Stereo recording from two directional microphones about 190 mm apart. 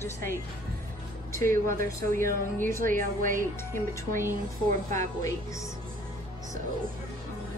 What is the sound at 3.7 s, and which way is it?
Speech, 15° left (ahead or behind).